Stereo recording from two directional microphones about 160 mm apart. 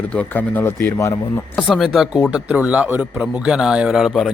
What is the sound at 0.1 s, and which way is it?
Speech, 10° left (ahead or behind).